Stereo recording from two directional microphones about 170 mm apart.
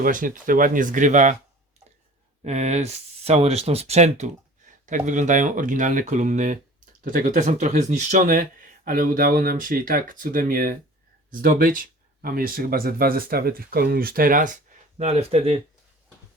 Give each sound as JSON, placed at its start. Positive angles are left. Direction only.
{"t": 0.0, "sound": "speech", "side_deg": -55}
{"t": 2.4, "sound": "speech", "side_deg": -40}